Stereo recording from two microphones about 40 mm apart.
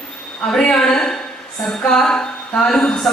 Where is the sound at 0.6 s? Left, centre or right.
Left.